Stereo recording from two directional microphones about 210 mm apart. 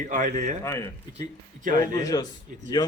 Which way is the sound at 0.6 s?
15° left (ahead or behind).